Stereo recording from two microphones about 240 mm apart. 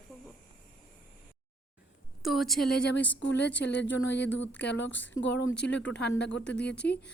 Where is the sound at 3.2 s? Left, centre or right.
Left.